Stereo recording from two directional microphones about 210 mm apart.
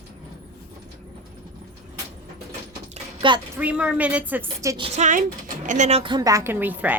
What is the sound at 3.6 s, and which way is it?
A woman's voice, 5° right (ahead or behind).